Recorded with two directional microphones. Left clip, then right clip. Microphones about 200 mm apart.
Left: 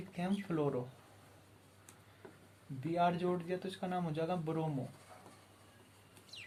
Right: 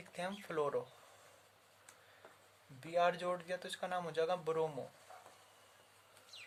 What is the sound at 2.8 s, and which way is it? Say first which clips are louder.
Speech: left 1 dB; 50° right (ahead or behind).